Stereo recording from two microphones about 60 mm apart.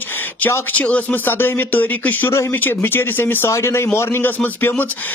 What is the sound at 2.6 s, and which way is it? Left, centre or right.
Speech, left.